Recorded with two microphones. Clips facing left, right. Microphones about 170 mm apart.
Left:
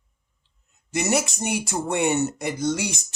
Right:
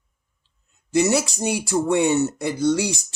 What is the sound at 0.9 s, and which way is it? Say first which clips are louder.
Speech: right 4 dB; 20° left (ahead or behind).